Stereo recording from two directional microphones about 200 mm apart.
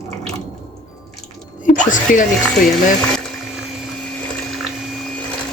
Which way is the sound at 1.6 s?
40° left (ahead or behind).